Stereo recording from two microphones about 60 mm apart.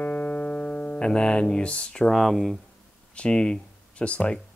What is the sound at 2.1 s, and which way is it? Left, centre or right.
Speech, centre.